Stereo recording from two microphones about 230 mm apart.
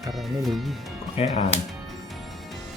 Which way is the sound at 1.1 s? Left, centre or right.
Left.